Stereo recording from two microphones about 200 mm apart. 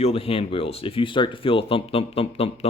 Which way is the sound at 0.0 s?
30° left (ahead or behind).